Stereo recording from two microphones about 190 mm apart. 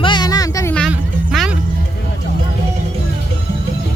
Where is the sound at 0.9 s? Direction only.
5° right (ahead or behind).